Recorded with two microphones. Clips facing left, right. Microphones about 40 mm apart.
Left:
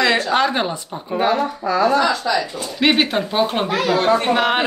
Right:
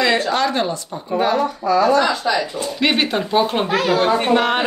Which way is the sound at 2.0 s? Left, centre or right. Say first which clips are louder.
Even; centre.